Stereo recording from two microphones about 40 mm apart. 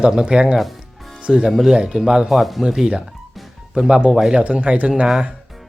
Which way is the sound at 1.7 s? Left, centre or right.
Centre.